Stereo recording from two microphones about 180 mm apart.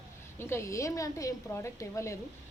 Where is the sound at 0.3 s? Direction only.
15° left (ahead or behind).